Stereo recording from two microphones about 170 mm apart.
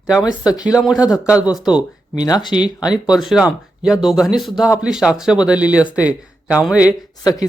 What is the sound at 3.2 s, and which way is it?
Speech, centre (ahead or behind).